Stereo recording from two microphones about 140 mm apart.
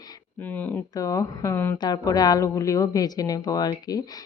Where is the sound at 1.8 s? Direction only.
30° left (ahead or behind).